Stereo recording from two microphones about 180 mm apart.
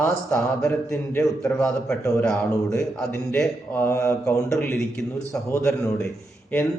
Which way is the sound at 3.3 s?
5° left (ahead or behind).